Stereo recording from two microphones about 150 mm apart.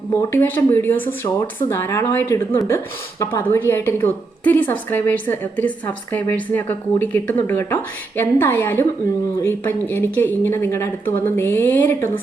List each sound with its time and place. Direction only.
0.1 s a woman's voice: 15° left (ahead or behind)